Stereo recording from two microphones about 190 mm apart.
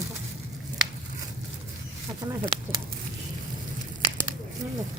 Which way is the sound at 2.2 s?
20° right (ahead or behind).